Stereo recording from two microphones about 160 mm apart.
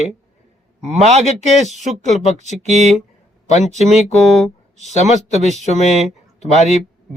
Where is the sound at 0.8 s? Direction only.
40° right (ahead or behind).